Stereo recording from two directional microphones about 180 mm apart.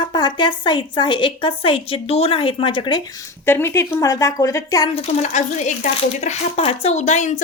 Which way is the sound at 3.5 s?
15° left (ahead or behind).